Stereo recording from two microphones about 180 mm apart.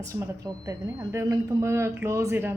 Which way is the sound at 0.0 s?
15° right (ahead or behind).